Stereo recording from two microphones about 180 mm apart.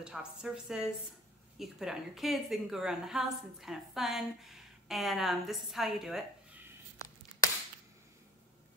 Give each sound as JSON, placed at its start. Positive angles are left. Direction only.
{"t": 0.0, "sound": "a woman's voice", "side_deg": -5}